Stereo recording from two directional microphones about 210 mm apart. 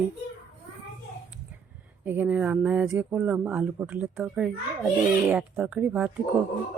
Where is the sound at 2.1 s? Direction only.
10° right (ahead or behind).